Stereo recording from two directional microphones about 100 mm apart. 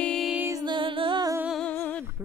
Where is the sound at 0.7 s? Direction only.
55° right (ahead or behind).